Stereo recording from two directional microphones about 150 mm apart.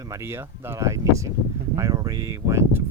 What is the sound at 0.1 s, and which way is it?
Speech, 15° right (ahead or behind).